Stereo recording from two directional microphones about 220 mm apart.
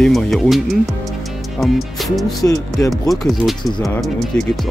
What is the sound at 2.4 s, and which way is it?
Speech, 15° left (ahead or behind).